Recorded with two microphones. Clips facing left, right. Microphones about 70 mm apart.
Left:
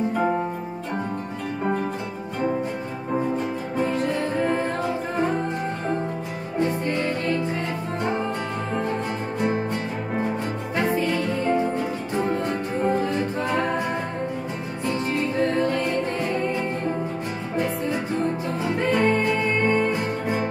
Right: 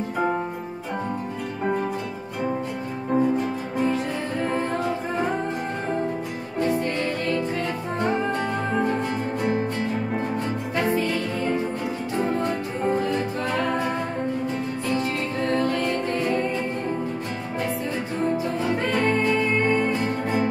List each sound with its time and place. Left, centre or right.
12.8 s music: centre
18.8 s music: centre